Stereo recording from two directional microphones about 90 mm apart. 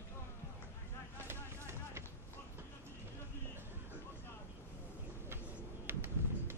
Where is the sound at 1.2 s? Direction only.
30° right (ahead or behind).